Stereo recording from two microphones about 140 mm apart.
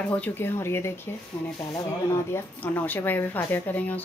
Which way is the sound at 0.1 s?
15° left (ahead or behind).